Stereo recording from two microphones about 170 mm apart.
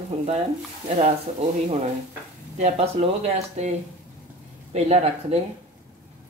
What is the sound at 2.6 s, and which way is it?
Speech, 40° right (ahead or behind).